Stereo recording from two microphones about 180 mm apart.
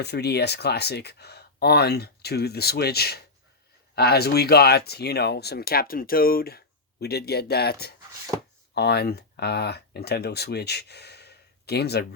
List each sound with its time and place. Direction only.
0.0 s speech: 65° left (ahead or behind)